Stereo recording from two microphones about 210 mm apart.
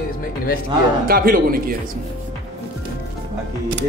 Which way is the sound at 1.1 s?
45° right (ahead or behind).